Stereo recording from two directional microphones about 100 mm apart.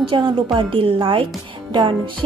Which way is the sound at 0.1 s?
55° right (ahead or behind).